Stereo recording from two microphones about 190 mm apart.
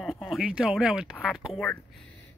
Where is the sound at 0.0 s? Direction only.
Centre (ahead or behind).